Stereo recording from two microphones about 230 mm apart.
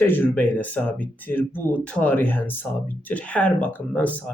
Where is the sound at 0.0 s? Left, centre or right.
Centre.